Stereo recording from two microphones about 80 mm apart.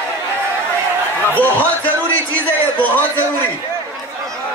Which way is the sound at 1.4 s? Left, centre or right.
Centre.